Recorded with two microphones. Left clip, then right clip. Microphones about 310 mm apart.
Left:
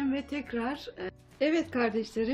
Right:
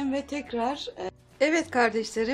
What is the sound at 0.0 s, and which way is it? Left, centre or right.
Speech, centre.